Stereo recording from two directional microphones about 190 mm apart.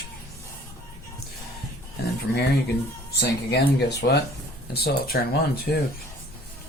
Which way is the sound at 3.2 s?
60° left (ahead or behind).